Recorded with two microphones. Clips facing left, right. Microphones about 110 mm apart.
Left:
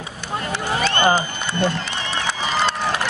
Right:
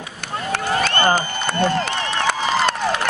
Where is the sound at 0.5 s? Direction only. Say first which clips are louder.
Right 2 dB; 50° right (ahead or behind).